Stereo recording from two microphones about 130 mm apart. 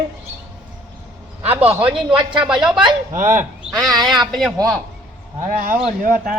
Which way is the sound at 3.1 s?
75° right (ahead or behind).